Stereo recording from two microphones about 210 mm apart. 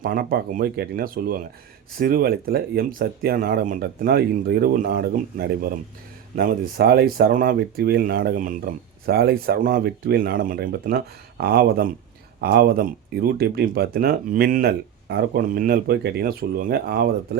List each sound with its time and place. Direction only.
0.0 s speech: 45° right (ahead or behind)